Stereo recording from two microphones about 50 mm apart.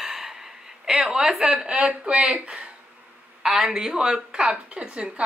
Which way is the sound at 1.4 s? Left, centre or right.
Right.